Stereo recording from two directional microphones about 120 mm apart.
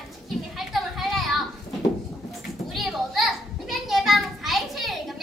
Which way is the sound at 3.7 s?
Centre (ahead or behind).